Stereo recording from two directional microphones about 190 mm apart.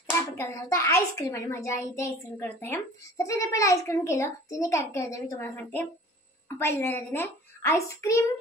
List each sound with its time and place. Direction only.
0.0 s a child's voice: 15° left (ahead or behind)